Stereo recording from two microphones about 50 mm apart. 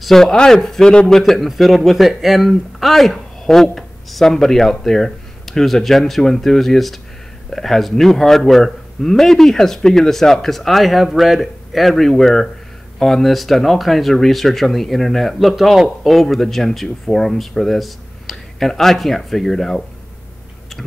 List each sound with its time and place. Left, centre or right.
0.0 s a man's voice: centre